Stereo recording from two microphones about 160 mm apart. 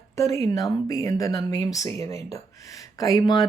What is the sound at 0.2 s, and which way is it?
Speech, 20° left (ahead or behind).